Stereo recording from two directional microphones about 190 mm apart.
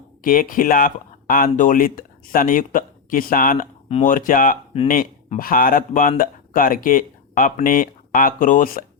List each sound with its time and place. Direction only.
0.2 s speech: 45° left (ahead or behind)